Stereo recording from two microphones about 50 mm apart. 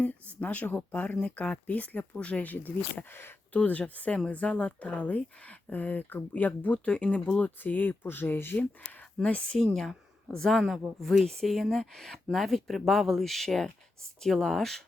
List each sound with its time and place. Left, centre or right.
0.0 s speech: left
3.5 s speech: left
7.6 s speech: left
8.5 s speech: left
10.3 s speech: centre